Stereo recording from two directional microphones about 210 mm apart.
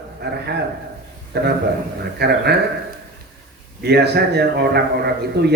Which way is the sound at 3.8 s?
50° right (ahead or behind).